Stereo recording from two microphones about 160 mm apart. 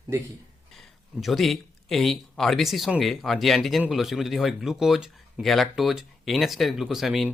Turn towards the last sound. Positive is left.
turn(degrees=0)  # may be behind; listen again after turning